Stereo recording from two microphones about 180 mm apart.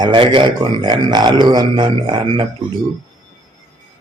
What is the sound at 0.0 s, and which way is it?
A man's voice, 30° right (ahead or behind).